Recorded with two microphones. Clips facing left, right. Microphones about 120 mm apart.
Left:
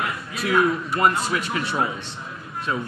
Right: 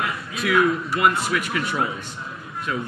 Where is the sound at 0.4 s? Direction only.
40° left (ahead or behind).